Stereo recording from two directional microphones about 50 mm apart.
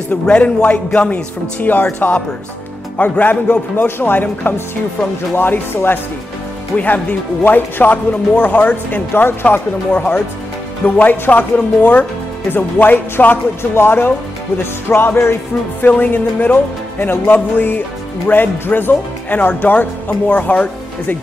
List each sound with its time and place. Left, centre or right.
0.3 s a man's voice: left
1.6 s speech: left
3.7 s speech: left
14.6 s music: left
15.8 s speech: left